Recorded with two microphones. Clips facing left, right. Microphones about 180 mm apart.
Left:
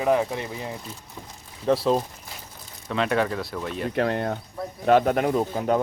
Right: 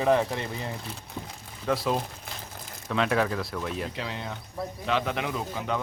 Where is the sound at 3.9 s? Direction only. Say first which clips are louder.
Left 11 dB; 55° left (ahead or behind).